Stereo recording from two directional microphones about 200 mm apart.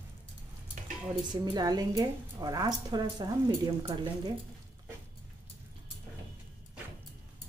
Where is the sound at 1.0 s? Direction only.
20° right (ahead or behind).